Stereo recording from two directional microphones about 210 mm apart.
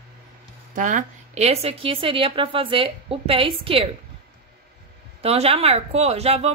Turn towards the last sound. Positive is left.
turn(degrees=-30)  # may be behind; listen again after turning